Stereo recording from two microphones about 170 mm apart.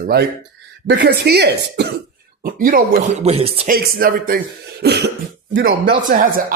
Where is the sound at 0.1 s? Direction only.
65° right (ahead or behind).